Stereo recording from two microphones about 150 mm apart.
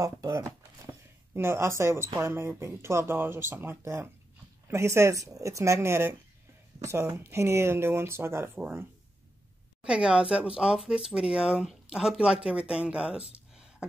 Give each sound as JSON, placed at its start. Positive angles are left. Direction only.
{"t": 0.0, "sound": "speech", "side_deg": -20}
{"t": 9.8, "sound": "speech", "side_deg": -5}